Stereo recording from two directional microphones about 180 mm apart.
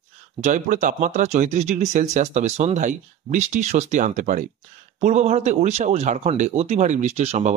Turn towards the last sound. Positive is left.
turn(degrees=-35)  # may be behind; listen again after turning